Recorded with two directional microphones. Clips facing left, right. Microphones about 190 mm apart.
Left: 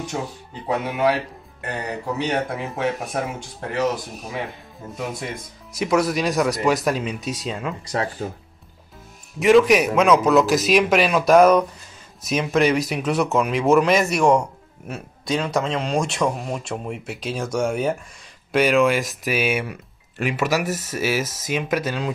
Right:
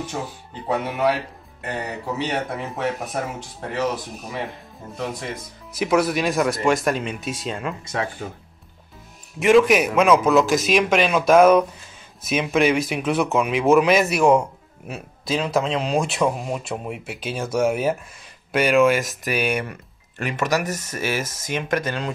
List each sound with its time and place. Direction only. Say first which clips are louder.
0.0 s speech: left 1 dB; centre (ahead or behind)
5.8 s speech: even; centre (ahead or behind)
7.8 s speech: left 3 dB; 35° left (ahead or behind)
9.4 s speech: left 1 dB; centre (ahead or behind)